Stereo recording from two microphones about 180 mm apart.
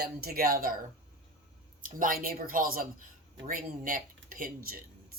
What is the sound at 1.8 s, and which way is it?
Speech, 50° right (ahead or behind).